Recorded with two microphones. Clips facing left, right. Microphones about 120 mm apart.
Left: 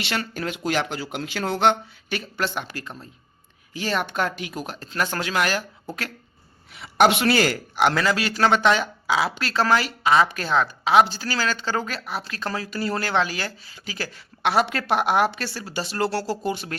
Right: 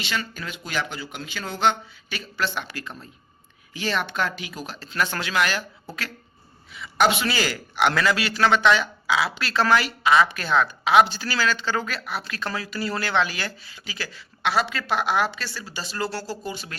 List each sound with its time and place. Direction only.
0.0 s speech: 70° left (ahead or behind); by 5.6 s 45° left (ahead or behind)
6.7 s speech: 65° left (ahead or behind)
7.8 s speech: 35° left (ahead or behind); by 16.6 s 65° left (ahead or behind)